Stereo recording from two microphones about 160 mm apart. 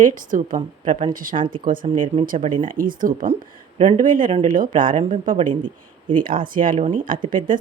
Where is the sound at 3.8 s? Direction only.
50° right (ahead or behind).